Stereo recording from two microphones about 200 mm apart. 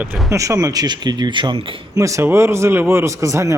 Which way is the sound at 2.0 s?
15° right (ahead or behind).